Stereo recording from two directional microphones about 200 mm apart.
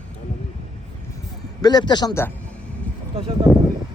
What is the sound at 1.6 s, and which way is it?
Speech, 20° left (ahead or behind).